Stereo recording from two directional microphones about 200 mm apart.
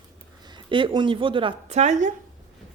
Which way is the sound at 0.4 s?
25° right (ahead or behind).